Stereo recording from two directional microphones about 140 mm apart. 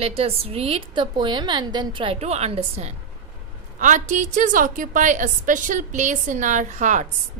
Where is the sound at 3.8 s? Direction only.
65° right (ahead or behind).